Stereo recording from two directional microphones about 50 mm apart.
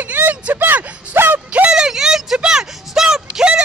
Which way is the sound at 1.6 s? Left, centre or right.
Centre.